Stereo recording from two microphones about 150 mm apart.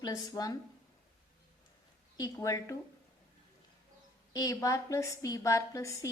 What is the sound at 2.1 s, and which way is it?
Speech, 20° left (ahead or behind).